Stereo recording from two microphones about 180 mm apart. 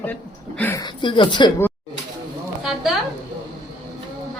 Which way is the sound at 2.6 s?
Centre (ahead or behind).